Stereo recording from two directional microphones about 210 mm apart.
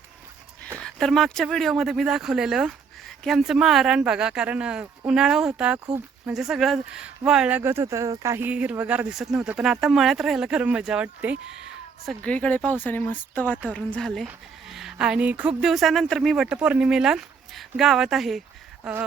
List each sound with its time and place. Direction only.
0.8 s speech: 5° left (ahead or behind)
5.8 s speech: 15° right (ahead or behind)
6.3 s speech: centre (ahead or behind)